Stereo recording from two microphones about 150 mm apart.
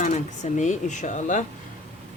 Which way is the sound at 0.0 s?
55° left (ahead or behind).